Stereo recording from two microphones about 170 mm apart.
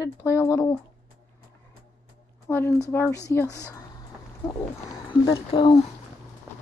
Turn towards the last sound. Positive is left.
turn(degrees=30)  # may be behind; listen again after turning